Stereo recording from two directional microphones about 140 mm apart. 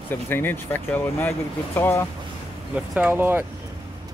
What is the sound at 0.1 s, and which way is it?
Speech, 15° left (ahead or behind).